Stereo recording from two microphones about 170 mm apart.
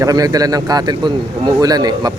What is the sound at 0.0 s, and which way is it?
Speech, 20° right (ahead or behind).